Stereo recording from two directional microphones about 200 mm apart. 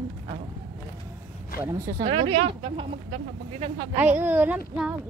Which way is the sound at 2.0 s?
30° right (ahead or behind).